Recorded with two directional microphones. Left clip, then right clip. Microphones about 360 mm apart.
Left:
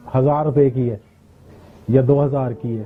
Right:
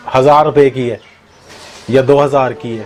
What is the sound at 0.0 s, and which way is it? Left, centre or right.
A man's voice, centre.